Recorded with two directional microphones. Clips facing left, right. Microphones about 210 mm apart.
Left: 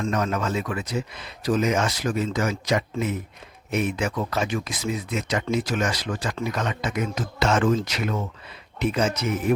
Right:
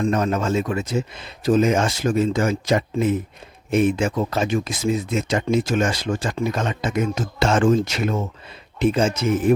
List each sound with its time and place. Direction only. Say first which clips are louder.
0.1 s speech: right 4 dB; 30° right (ahead or behind)